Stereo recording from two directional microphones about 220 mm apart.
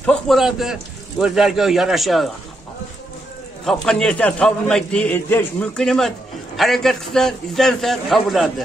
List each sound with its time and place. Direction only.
0.0 s a man's voice: centre (ahead or behind)
3.6 s a man's voice: centre (ahead or behind)